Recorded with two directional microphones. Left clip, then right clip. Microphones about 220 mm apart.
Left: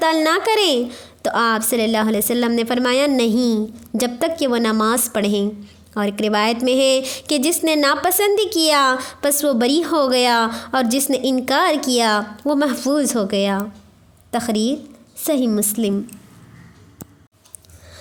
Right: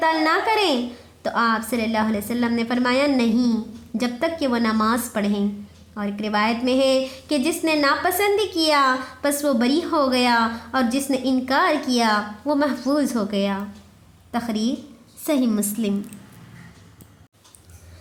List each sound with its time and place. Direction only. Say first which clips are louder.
0.0 s a woman's voice: left 3 dB; 40° left (ahead or behind)